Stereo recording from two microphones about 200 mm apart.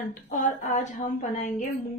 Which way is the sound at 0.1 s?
40° left (ahead or behind).